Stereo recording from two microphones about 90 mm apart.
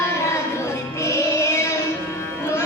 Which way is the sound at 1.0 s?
35° left (ahead or behind).